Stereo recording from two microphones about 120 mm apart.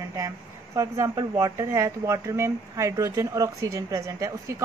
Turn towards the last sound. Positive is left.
turn(degrees=-25)  # may be behind; listen again after turning